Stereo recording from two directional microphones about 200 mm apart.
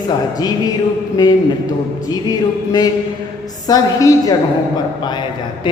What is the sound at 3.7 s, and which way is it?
Speech, 20° left (ahead or behind).